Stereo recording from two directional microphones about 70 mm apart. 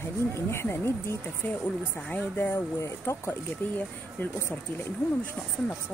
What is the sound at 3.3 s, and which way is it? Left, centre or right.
Speech, left.